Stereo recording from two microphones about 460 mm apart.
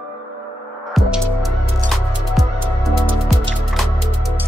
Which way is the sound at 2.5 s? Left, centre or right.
Right.